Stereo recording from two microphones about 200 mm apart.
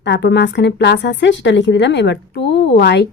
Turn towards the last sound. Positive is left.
turn(degrees=60)  # may be behind; listen again after turning